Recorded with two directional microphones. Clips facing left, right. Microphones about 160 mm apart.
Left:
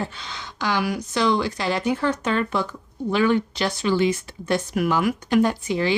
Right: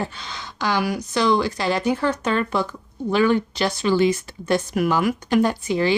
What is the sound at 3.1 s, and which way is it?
Speech, 40° right (ahead or behind).